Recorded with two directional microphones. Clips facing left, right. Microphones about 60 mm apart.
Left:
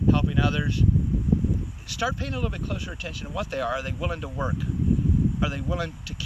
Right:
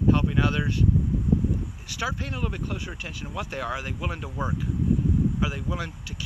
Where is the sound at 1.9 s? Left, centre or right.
Centre.